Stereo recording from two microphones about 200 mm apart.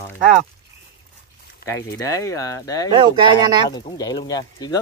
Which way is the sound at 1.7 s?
15° left (ahead or behind).